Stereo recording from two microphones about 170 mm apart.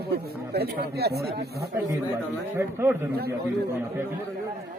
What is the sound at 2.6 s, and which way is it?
A man's voice, 15° right (ahead or behind).